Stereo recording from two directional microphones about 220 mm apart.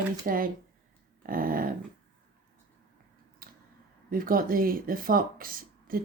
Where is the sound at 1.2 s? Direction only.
40° right (ahead or behind).